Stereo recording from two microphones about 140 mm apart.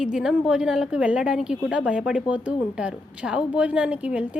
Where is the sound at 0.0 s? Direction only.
5° right (ahead or behind).